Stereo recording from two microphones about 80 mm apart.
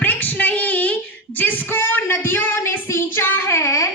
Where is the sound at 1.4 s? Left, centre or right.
Left.